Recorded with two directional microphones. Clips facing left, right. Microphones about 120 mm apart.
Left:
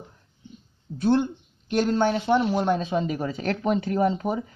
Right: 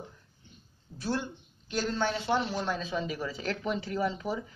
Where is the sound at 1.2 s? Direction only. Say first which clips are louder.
Left 10 dB; 60° left (ahead or behind).